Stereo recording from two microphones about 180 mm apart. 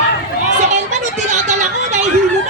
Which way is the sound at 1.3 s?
40° right (ahead or behind).